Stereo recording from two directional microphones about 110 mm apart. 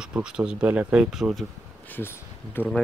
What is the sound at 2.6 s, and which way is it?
Speech, 20° left (ahead or behind).